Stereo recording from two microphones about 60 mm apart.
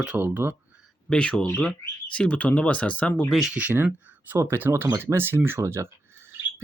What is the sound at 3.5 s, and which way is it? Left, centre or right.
Speech, right.